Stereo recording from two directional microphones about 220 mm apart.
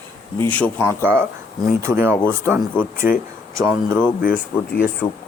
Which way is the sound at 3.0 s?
40° left (ahead or behind).